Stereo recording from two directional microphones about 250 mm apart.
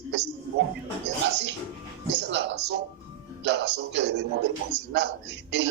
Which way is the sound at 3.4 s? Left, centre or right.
Right.